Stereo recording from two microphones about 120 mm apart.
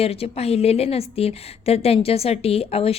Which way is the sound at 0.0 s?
55° left (ahead or behind).